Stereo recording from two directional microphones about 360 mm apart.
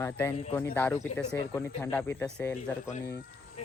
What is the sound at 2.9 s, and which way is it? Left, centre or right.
Speech, left.